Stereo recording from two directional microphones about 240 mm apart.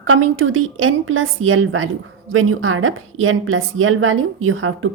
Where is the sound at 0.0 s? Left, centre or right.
Right.